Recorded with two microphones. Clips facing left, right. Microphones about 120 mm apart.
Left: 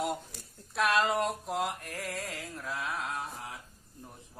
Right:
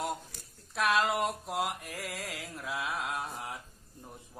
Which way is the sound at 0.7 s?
Centre (ahead or behind).